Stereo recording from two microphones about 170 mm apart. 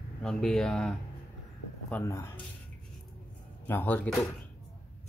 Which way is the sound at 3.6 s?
10° left (ahead or behind).